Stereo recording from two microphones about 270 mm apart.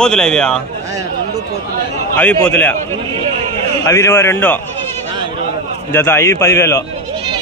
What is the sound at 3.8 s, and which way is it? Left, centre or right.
Speech, centre.